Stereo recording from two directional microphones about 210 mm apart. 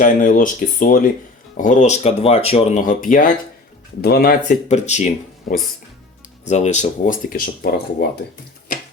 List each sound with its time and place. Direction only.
0.0 s speech: 40° left (ahead or behind)
4.7 s speech: 35° left (ahead or behind)